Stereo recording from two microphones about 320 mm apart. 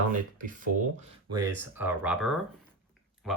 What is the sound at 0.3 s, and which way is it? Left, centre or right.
Speech, right.